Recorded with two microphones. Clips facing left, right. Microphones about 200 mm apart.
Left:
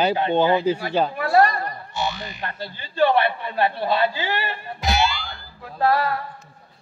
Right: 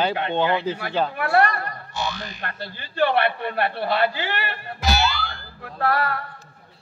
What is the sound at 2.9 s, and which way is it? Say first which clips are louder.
A man's voice: left 2 dB; 65° right (ahead or behind).